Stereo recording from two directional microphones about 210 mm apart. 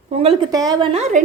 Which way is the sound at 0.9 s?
30° right (ahead or behind).